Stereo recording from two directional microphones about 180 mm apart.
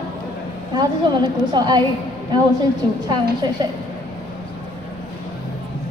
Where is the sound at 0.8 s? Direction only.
25° right (ahead or behind).